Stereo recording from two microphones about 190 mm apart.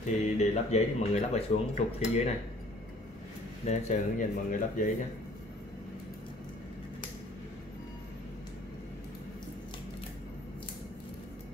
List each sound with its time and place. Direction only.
0.0 s speech: 35° left (ahead or behind)
3.6 s speech: 40° left (ahead or behind)